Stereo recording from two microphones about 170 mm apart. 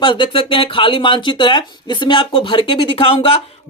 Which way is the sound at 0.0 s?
30° left (ahead or behind).